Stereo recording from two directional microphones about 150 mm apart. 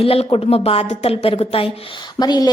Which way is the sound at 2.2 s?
25° left (ahead or behind).